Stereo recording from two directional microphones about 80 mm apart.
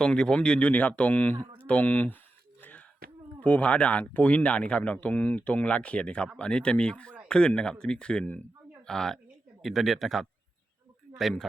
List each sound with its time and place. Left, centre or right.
0.0 s speech: centre
2.6 s a sound: left
3.4 s a man's voice: centre